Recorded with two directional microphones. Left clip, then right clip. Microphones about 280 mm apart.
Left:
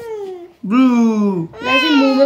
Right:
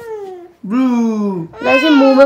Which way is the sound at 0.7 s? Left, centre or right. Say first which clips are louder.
Left 2 dB; centre.